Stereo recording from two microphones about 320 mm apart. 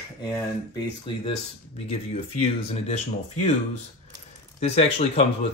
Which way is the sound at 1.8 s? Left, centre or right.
Centre.